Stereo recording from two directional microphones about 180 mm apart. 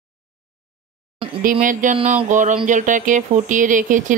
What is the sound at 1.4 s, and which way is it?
Speech, 50° right (ahead or behind).